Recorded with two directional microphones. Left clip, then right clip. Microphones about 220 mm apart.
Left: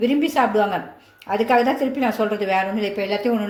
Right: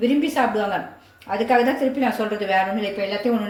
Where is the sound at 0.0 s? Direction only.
30° left (ahead or behind).